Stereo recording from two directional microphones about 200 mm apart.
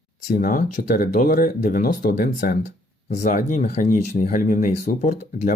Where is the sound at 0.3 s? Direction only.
40° left (ahead or behind).